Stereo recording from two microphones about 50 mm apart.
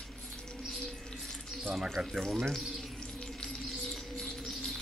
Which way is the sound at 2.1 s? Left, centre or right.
Centre.